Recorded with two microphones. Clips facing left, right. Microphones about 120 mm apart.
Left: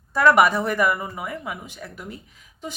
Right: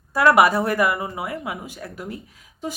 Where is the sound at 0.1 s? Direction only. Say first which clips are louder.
Right 1 dB; 5° right (ahead or behind).